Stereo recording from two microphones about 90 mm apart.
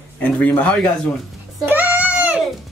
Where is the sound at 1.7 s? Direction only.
20° right (ahead or behind).